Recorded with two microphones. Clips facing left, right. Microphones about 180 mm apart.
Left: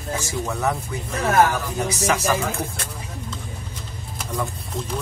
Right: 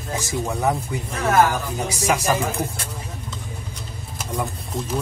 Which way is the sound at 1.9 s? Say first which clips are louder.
Right 2 dB; 15° right (ahead or behind).